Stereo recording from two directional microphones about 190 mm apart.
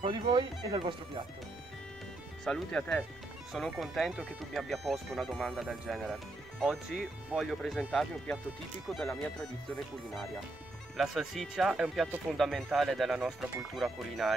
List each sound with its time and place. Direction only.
0.0 s speech: 25° right (ahead or behind)
2.4 s speech: 5° left (ahead or behind)